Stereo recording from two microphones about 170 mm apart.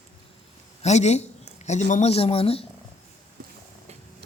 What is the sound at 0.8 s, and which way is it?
A man's voice, 40° left (ahead or behind).